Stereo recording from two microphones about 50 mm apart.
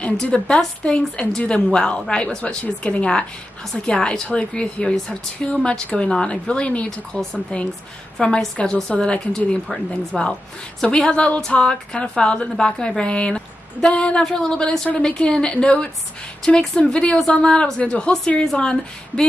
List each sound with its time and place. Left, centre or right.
0.2 s a woman's voice: centre